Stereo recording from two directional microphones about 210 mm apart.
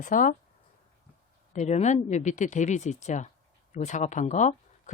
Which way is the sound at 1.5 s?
35° left (ahead or behind).